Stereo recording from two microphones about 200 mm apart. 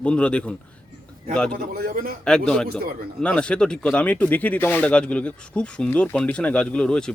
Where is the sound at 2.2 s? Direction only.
5° left (ahead or behind).